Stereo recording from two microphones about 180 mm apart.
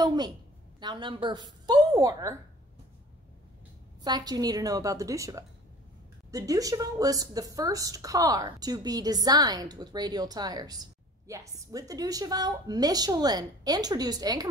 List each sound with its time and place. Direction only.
0.0 s a woman's voice: 25° right (ahead or behind)
4.0 s a woman's voice: 20° right (ahead or behind)